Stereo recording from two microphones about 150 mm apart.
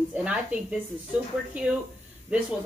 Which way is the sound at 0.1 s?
10° right (ahead or behind).